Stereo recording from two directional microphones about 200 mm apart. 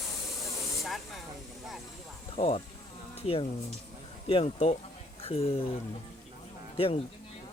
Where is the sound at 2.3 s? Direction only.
30° left (ahead or behind).